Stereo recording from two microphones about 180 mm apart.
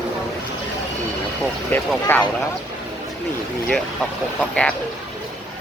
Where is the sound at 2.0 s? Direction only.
20° left (ahead or behind).